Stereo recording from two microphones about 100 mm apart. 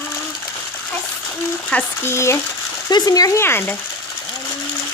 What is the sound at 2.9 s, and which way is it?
Speech, 40° left (ahead or behind).